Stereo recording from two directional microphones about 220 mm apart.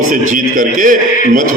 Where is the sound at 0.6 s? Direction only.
35° right (ahead or behind).